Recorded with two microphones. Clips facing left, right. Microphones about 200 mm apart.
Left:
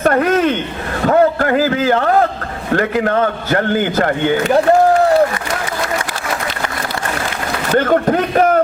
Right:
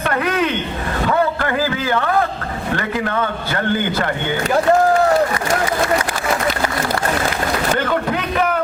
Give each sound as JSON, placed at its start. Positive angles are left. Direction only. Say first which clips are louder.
{"t": 0.0, "sound": "a man's voice", "louder": "left 6 dB", "side_deg": 45}
{"t": 1.0, "sound": "a sound", "louder": "left 6 dB", "side_deg": 45}
{"t": 2.7, "sound": "a man's voice", "louder": "left 7 dB", "side_deg": 45}
{"t": 7.8, "sound": "a man's voice", "louder": "left 6 dB", "side_deg": 45}